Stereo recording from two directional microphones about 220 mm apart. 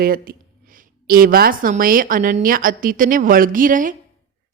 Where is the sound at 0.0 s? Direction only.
40° right (ahead or behind).